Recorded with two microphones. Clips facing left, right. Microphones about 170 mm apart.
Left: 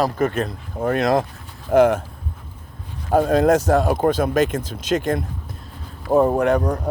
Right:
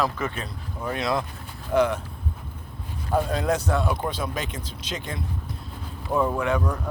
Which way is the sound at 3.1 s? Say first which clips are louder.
Left 8 dB; 50° left (ahead or behind).